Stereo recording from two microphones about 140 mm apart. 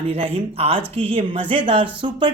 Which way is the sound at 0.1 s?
45° right (ahead or behind).